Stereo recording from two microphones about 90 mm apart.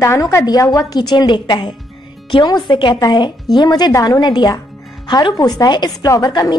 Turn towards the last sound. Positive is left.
turn(degrees=40)  # may be behind; listen again after turning